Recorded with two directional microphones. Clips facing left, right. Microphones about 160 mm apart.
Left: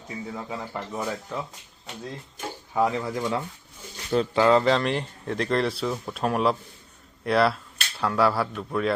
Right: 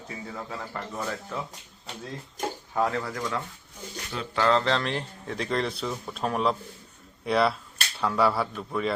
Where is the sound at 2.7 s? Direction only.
15° left (ahead or behind).